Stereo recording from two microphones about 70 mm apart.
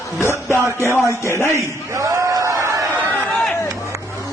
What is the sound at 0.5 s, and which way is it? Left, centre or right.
Music, left.